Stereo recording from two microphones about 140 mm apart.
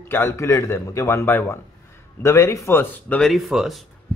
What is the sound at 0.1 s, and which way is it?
A man's voice, 20° left (ahead or behind).